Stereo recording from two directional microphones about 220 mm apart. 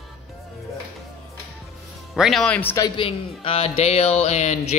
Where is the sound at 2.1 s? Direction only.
Centre (ahead or behind); by 4.7 s 30° left (ahead or behind).